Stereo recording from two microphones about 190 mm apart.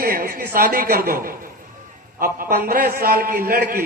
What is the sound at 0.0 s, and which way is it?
A woman's voice, 55° right (ahead or behind).